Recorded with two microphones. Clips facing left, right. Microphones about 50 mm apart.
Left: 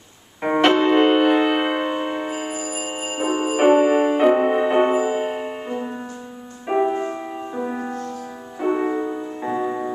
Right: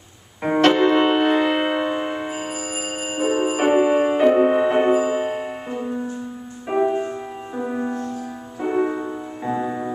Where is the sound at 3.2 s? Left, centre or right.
Centre.